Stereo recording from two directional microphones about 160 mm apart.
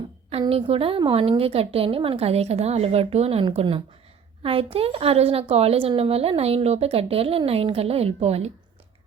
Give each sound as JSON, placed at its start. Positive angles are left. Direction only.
{"t": 0.3, "sound": "a woman's voice", "side_deg": -40}